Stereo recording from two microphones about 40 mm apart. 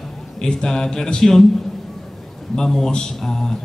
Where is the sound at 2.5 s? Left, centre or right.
Centre.